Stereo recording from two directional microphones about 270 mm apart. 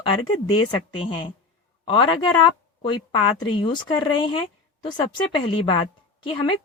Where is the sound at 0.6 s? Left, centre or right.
Centre.